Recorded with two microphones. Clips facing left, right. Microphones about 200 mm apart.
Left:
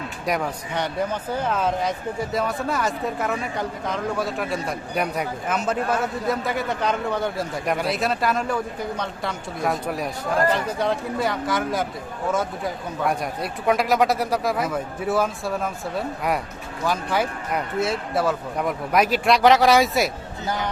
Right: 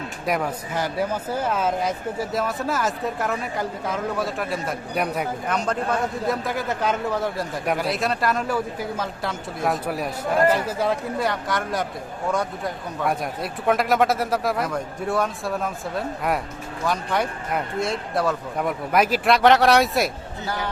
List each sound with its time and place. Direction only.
0.3 s speech: centre (ahead or behind)
20.4 s speech: 20° left (ahead or behind)